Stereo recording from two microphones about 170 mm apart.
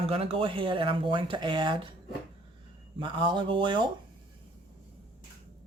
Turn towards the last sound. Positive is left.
turn(degrees=-25)  # may be behind; listen again after turning